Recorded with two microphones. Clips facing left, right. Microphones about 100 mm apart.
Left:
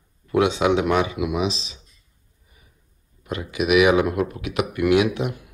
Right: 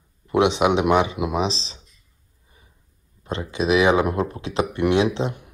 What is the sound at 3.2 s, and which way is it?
Speech, 30° right (ahead or behind).